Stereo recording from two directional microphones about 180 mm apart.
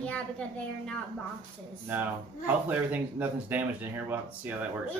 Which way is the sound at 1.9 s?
10° right (ahead or behind).